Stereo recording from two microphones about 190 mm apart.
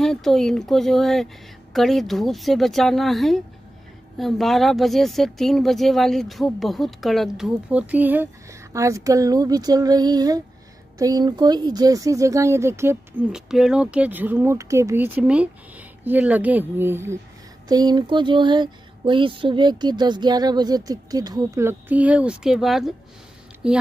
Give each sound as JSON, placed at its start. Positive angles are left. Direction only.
{"t": 0.0, "sound": "speech", "side_deg": 0}
{"t": 13.3, "sound": "speech", "side_deg": -5}
{"t": 17.6, "sound": "a sound", "side_deg": -20}
{"t": 23.6, "sound": "speech", "side_deg": -5}